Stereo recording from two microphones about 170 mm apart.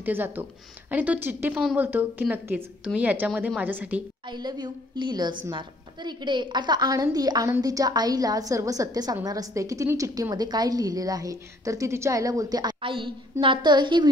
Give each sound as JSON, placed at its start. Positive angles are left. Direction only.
{"t": 0.0, "sound": "a woman's voice", "side_deg": -10}
{"t": 4.3, "sound": "a woman's voice", "side_deg": -25}